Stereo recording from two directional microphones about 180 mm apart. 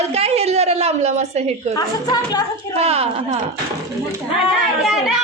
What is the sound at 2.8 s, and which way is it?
Speech, 35° right (ahead or behind).